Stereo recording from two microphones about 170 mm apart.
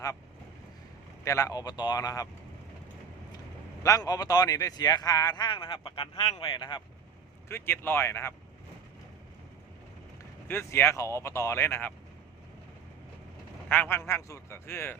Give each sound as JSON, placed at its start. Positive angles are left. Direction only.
{"t": 1.2, "sound": "speech", "side_deg": 20}
{"t": 3.8, "sound": "speech", "side_deg": 20}
{"t": 7.4, "sound": "speech", "side_deg": 15}
{"t": 10.5, "sound": "speech", "side_deg": 15}
{"t": 13.7, "sound": "speech", "side_deg": 10}